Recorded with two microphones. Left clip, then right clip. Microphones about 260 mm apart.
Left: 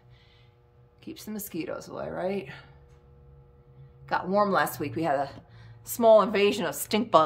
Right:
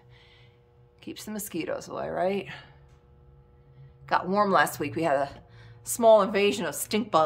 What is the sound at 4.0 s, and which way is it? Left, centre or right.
Speech, centre.